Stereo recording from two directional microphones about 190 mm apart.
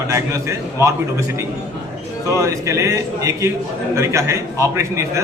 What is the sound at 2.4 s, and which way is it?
A man's voice, 15° right (ahead or behind).